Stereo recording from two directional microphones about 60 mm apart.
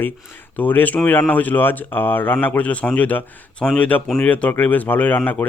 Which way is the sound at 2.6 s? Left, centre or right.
Left.